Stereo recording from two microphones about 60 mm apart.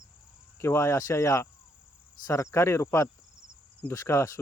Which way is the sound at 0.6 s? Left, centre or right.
Left.